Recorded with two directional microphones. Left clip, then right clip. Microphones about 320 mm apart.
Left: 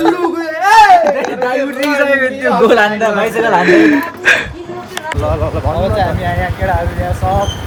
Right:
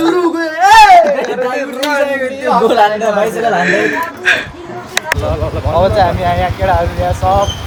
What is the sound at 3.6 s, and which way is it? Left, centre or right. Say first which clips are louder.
Speech: left 3 dB; centre.